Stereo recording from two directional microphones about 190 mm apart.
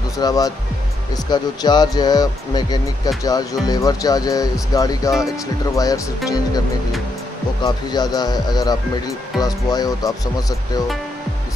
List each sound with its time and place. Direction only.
0.2 s speech: 20° left (ahead or behind)
7.6 s speech: 20° left (ahead or behind)